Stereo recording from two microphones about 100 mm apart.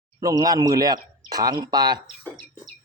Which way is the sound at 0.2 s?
35° right (ahead or behind).